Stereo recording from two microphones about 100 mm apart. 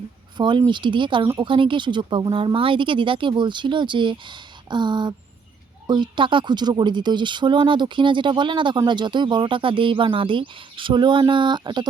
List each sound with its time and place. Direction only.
0.3 s speech: 50° right (ahead or behind)